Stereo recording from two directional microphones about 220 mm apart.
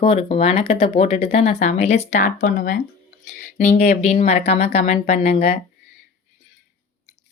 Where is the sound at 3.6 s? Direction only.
30° left (ahead or behind).